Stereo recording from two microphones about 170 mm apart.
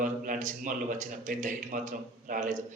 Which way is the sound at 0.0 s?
50° right (ahead or behind).